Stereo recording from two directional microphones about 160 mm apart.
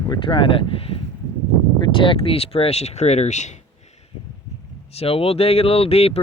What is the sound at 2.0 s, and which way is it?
Speech, 35° left (ahead or behind).